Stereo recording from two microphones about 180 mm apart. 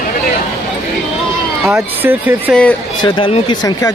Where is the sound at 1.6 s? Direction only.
15° right (ahead or behind).